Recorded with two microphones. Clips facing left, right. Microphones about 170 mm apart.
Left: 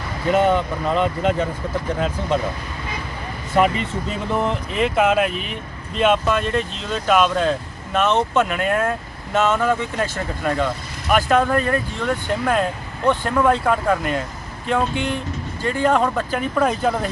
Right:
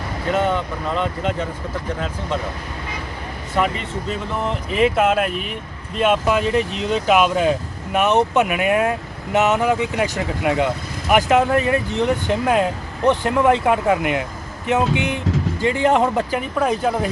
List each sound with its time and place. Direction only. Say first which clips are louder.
0.5 s speech: left 3 dB; 15° left (ahead or behind)
4.4 s speech: right 3 dB; centre (ahead or behind)
6.7 s speech: right 7 dB; 70° right (ahead or behind)
6.9 s speech: right 1 dB; 15° right (ahead or behind)